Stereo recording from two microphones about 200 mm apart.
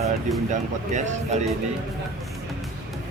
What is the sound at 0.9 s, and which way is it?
Speech, 35° right (ahead or behind).